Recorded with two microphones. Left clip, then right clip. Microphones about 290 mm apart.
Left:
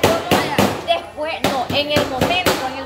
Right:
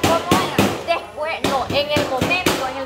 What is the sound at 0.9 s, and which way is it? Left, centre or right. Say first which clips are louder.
Music: left 1 dB; centre.